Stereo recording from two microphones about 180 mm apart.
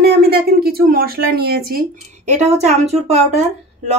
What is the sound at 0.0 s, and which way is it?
Speech, 60° right (ahead or behind).